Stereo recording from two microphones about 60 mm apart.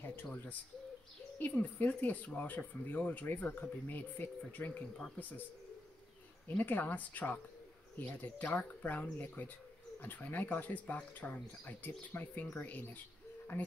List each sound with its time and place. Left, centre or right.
0.0 s bird: left
1.4 s speech: left
6.4 s speech: left
11.6 s speech: left